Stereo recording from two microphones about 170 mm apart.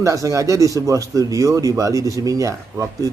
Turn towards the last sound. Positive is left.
turn(degrees=-20)  # may be behind; listen again after turning